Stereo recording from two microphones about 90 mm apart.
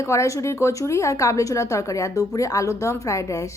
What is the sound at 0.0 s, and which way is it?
Speech, 35° left (ahead or behind).